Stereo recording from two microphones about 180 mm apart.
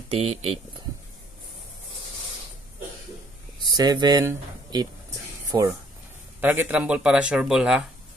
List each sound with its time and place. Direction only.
0.1 s speech: 35° right (ahead or behind)
3.7 s speech: 20° right (ahead or behind); by 7.8 s 5° right (ahead or behind)